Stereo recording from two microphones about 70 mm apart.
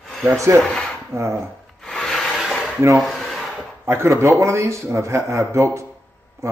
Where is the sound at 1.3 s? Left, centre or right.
Centre.